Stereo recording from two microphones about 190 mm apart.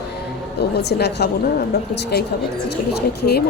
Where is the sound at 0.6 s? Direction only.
60° left (ahead or behind).